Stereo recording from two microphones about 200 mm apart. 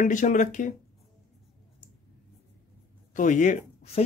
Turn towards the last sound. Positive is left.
turn(degrees=40)  # may be behind; listen again after turning